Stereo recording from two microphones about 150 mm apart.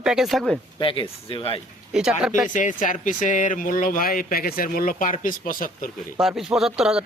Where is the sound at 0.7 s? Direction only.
35° left (ahead or behind).